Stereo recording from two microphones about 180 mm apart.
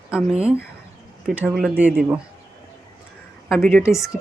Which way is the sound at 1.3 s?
5° right (ahead or behind).